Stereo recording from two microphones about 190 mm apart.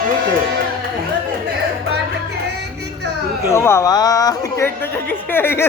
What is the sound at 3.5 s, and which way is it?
Speech, 15° left (ahead or behind).